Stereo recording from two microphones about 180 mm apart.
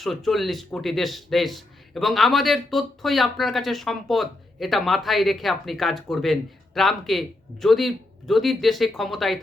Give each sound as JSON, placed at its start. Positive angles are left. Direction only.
{"t": 0.0, "sound": "a man's voice", "side_deg": 0}